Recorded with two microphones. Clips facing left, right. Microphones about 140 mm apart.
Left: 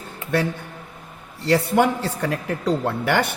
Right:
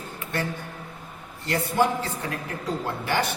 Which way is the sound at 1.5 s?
75° left (ahead or behind).